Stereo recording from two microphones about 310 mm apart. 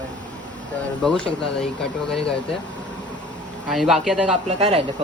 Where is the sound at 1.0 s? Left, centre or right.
Centre.